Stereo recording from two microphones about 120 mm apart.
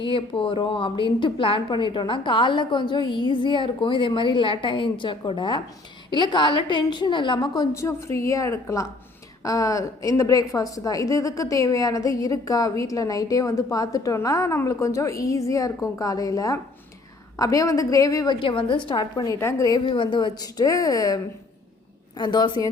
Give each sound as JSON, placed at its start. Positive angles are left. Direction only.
{"t": 0.0, "sound": "a woman's voice", "side_deg": 45}
{"t": 7.7, "sound": "a woman's voice", "side_deg": 25}
{"t": 18.3, "sound": "a woman's voice", "side_deg": 45}
{"t": 22.2, "sound": "a woman's voice", "side_deg": 35}